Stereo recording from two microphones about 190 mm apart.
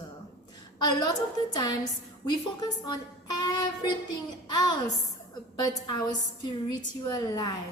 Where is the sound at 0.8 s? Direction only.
20° left (ahead or behind).